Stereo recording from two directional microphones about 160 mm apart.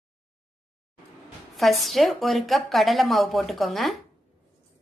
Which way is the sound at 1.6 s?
Centre (ahead or behind).